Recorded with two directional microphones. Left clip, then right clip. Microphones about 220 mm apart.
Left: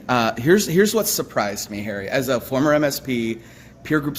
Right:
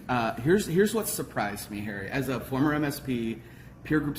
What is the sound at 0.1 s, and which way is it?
Speech, 45° left (ahead or behind).